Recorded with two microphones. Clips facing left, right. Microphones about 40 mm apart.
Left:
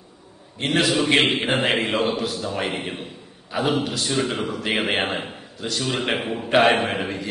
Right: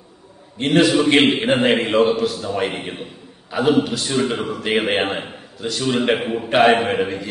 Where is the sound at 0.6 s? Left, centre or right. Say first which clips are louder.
Right 5 dB; centre.